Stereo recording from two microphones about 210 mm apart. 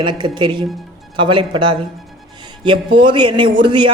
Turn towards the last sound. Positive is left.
turn(degrees=-20)  # may be behind; listen again after turning